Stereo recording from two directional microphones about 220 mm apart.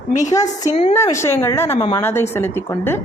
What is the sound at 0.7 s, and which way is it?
Speech, 25° left (ahead or behind).